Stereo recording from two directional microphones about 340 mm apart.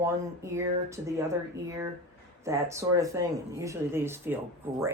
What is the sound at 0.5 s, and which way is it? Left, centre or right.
Speech, centre.